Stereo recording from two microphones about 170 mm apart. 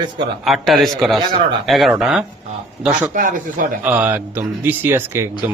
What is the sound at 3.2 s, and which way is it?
Speech, 50° right (ahead or behind).